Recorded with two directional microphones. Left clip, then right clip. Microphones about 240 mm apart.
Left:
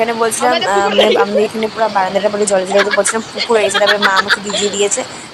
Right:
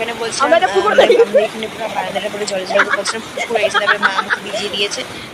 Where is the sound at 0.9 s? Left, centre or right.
Centre.